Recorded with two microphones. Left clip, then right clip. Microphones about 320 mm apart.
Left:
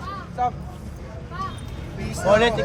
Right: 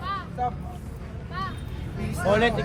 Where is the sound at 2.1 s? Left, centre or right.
Left.